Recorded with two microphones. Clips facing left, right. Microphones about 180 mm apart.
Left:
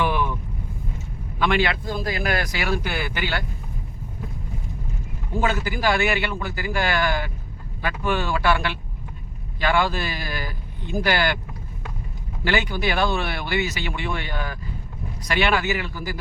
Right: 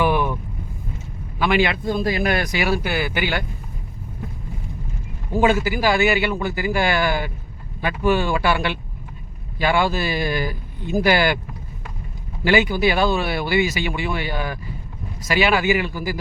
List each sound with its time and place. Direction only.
0.1 s vehicle: 50° right (ahead or behind)
1.4 s a man's voice: 10° right (ahead or behind)
1.9 s speech: 25° right (ahead or behind); by 3.2 s 5° right (ahead or behind)
5.4 s speech: 10° right (ahead or behind)
12.5 s speech: 10° right (ahead or behind)